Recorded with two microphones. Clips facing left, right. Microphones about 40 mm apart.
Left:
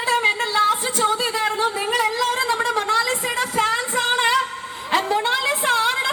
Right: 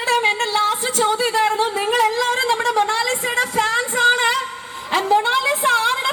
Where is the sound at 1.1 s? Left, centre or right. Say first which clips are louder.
Right 4 dB; centre.